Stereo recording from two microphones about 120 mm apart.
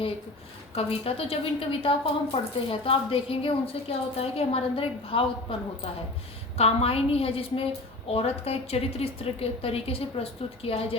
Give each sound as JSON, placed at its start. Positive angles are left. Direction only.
{"t": 0.8, "sound": "a woman's voice", "side_deg": 50}